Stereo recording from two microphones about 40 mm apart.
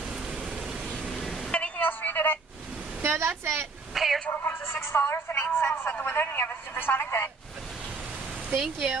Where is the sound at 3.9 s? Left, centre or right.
Centre.